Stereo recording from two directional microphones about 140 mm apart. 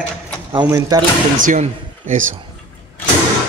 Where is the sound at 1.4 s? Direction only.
65° right (ahead or behind).